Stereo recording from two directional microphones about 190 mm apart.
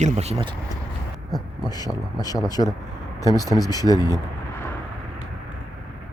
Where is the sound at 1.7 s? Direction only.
20° left (ahead or behind).